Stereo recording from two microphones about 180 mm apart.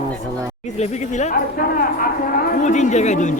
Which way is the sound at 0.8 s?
40° left (ahead or behind).